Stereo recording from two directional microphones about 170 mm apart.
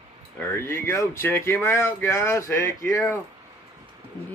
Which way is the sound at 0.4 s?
15° left (ahead or behind).